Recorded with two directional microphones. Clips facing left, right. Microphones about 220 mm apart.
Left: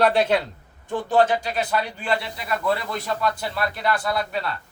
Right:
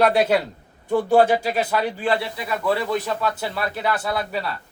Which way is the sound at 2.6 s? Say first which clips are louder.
Right 4 dB; 5° right (ahead or behind).